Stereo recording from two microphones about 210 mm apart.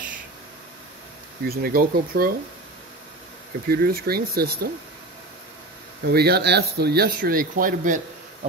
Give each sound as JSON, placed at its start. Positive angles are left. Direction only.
{"t": 1.4, "sound": "speech", "side_deg": -45}
{"t": 3.6, "sound": "speech", "side_deg": -45}
{"t": 6.1, "sound": "speech", "side_deg": -50}